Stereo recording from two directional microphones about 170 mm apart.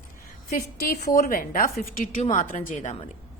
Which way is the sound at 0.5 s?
55° left (ahead or behind).